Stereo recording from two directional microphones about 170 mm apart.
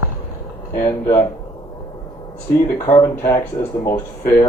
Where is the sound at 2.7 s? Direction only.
20° left (ahead or behind).